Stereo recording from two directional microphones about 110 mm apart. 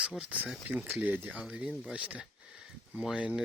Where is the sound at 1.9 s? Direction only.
10° right (ahead or behind).